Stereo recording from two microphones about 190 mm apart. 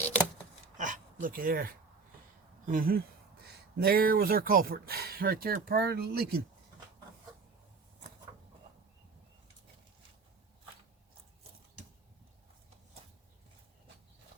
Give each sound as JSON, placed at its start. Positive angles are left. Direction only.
{"t": 0.8, "sound": "dog", "side_deg": -40}
{"t": 2.6, "sound": "speech", "side_deg": -50}